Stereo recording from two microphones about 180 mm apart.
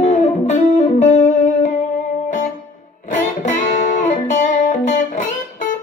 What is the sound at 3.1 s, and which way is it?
Music, 45° left (ahead or behind).